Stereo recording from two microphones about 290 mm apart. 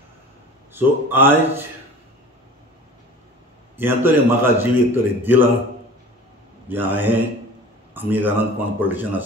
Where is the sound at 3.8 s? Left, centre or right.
Centre.